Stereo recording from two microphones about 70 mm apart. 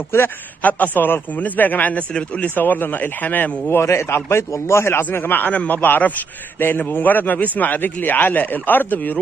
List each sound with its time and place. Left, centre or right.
0.1 s a man's voice: left
0.6 s speech: left
2.5 s speech: left